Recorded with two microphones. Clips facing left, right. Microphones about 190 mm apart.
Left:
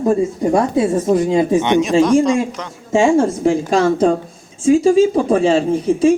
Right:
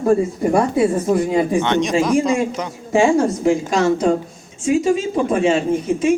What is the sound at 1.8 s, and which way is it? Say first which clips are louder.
Speech: left 4 dB; centre (ahead or behind).